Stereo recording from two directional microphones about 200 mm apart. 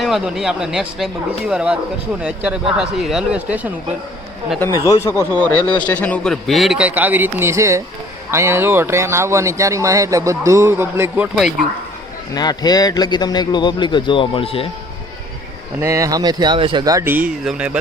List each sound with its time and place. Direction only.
0.0 s a man's voice: centre (ahead or behind)
4.9 s a man's voice: 15° left (ahead or behind); by 11.3 s 10° right (ahead or behind)
12.3 s a man's voice: 20° left (ahead or behind)
15.8 s a man's voice: 15° right (ahead or behind)